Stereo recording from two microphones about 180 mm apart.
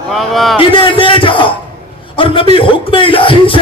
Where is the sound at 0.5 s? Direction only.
30° left (ahead or behind).